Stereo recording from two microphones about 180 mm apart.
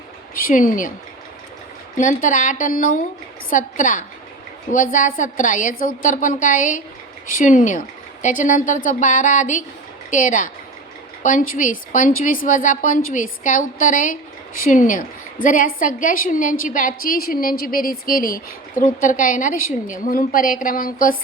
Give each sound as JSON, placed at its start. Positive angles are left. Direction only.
{"t": 0.3, "sound": "a woman's voice", "side_deg": 50}
{"t": 2.0, "sound": "a woman's voice", "side_deg": 45}